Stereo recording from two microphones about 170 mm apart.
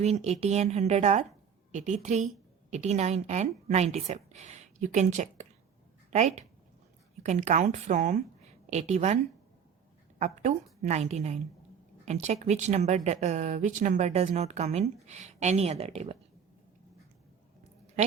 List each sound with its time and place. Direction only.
0.0 s a woman's voice: 40° right (ahead or behind)
10.2 s a woman's voice: 45° right (ahead or behind)